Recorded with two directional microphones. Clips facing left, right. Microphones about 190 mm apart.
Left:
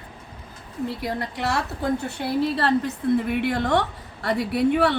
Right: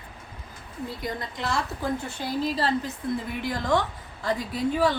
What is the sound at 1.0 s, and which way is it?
A woman's voice, 70° left (ahead or behind).